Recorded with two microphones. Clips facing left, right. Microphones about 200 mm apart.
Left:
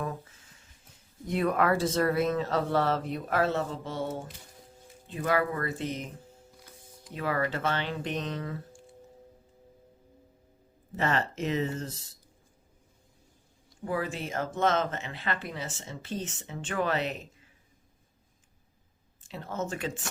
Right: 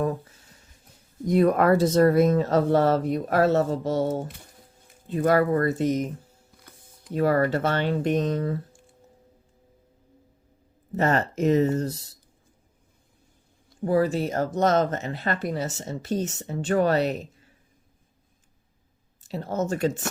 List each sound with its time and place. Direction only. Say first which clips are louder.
0.0 s a sound: right 9 dB; 40° right (ahead or behind)
1.3 s speech: right 7 dB; 40° right (ahead or behind)
10.9 s speech: right 6 dB; 40° right (ahead or behind)
13.8 s speech: right 10 dB; 40° right (ahead or behind)
19.2 s speech: right 7 dB; 40° right (ahead or behind)